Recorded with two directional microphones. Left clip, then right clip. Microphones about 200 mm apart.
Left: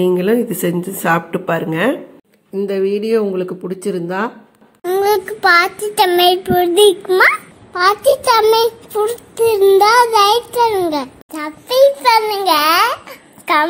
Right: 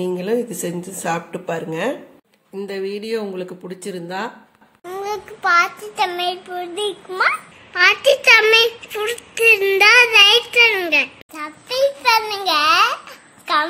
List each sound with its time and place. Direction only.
0.0 s speech: 10° left (ahead or behind)
4.8 s child singing: 25° left (ahead or behind)
8.3 s a child's voice: 5° right (ahead or behind)
9.4 s speech: 15° left (ahead or behind)
9.8 s a child's voice: 5° right (ahead or behind)
11.3 s child singing: 20° left (ahead or behind)